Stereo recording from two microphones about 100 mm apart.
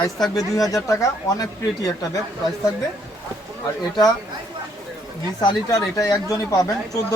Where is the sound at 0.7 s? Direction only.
35° left (ahead or behind).